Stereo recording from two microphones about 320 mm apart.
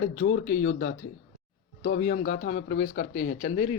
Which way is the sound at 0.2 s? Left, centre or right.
Left.